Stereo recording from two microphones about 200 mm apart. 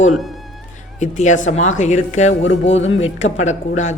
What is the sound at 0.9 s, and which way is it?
A woman's voice, 35° left (ahead or behind).